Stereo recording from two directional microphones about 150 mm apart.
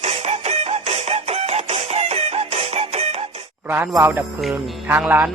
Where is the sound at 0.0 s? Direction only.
45° right (ahead or behind).